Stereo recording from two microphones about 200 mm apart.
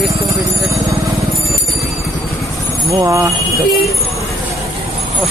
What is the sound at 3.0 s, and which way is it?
Speech, 15° right (ahead or behind).